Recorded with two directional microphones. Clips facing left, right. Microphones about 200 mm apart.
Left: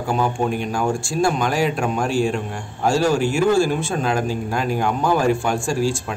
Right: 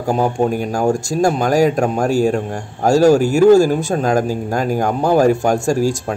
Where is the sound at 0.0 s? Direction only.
40° right (ahead or behind).